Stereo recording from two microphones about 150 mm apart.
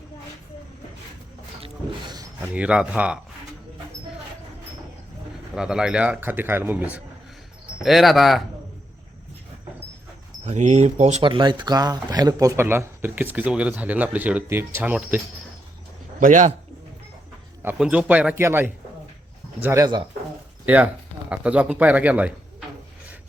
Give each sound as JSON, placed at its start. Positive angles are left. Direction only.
{"t": 1.6, "sound": "a sound", "side_deg": -30}
{"t": 2.6, "sound": "speech", "side_deg": -5}
{"t": 5.5, "sound": "speech", "side_deg": -5}
{"t": 10.4, "sound": "speech", "side_deg": -50}
{"t": 11.2, "sound": "speech", "side_deg": -35}
{"t": 16.2, "sound": "a man's voice", "side_deg": -60}
{"t": 17.6, "sound": "speech", "side_deg": -10}
{"t": 20.7, "sound": "speech", "side_deg": -10}